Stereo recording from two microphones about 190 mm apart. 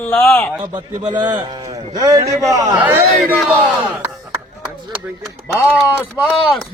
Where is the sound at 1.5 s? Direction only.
20° right (ahead or behind).